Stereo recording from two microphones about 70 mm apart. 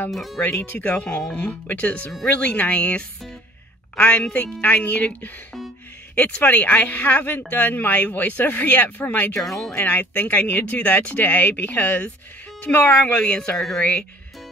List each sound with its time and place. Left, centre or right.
0.1 s speech: centre
0.4 s speech: left
9.3 s speech: centre
9.7 s speech: centre